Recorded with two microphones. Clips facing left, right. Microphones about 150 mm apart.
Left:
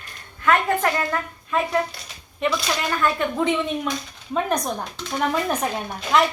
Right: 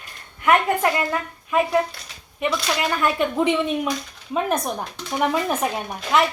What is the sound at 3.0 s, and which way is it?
A woman's voice, 15° right (ahead or behind).